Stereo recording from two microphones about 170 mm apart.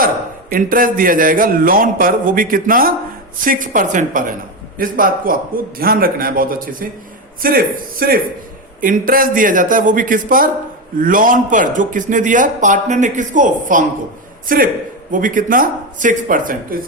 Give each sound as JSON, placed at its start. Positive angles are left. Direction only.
{"t": 0.5, "sound": "a man's voice", "side_deg": -55}